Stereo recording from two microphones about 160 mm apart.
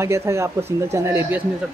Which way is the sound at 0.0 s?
15° right (ahead or behind).